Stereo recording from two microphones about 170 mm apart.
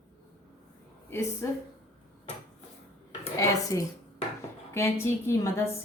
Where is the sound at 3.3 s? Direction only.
20° left (ahead or behind).